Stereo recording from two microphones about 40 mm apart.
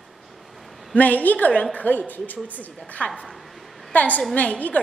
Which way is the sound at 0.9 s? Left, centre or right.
Left.